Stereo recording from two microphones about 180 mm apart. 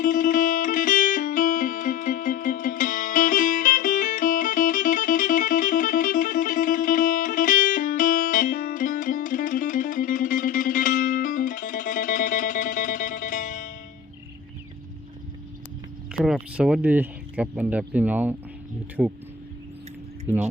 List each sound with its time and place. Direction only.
0.0 s music: 45° left (ahead or behind)
16.1 s speech: centre (ahead or behind)
20.2 s speech: 10° right (ahead or behind)